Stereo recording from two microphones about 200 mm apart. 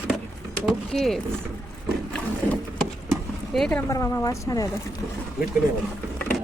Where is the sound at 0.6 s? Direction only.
Centre (ahead or behind).